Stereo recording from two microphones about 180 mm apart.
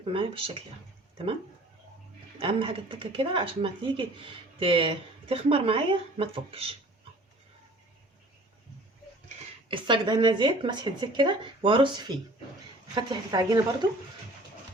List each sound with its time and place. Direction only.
0.0 s speech: 30° right (ahead or behind)
2.4 s speech: 30° right (ahead or behind)
9.6 s speech: 25° right (ahead or behind)